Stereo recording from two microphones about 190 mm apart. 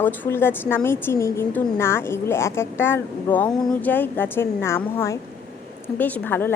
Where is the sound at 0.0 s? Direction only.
10° left (ahead or behind).